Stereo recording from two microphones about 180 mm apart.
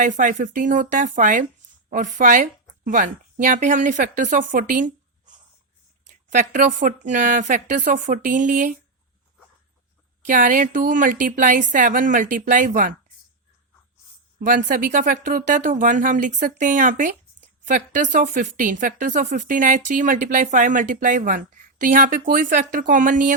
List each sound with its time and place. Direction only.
0.0 s speech: 45° right (ahead or behind)
10.2 s speech: 45° right (ahead or behind)
14.3 s speech: 50° right (ahead or behind)